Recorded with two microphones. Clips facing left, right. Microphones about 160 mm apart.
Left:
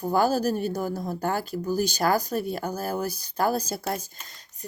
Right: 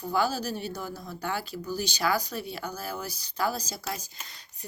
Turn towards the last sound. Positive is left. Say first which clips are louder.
# left 7 dB
turn(degrees=55)  # may be behind; listen again after turning